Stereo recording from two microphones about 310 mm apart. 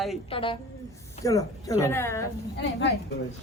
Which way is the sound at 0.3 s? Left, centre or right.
Centre.